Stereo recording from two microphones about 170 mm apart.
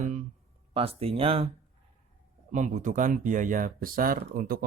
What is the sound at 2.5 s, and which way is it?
Speech, 50° right (ahead or behind).